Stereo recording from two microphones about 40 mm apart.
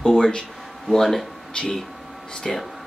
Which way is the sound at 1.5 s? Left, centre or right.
Centre.